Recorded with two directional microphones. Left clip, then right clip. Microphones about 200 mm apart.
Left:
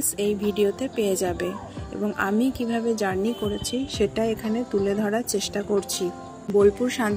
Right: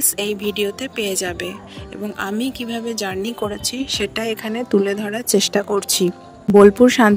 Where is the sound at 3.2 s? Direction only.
55° right (ahead or behind).